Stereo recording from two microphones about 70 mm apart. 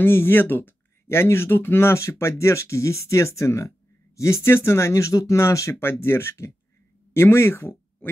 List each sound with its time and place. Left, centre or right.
0.0 s speech: left
5.8 s speech: left